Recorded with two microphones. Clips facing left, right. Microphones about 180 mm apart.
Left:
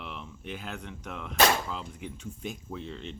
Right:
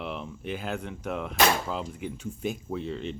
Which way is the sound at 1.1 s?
40° right (ahead or behind).